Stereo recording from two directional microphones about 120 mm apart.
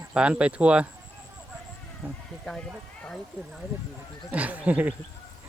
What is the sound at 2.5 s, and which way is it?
Speech, 5° left (ahead or behind).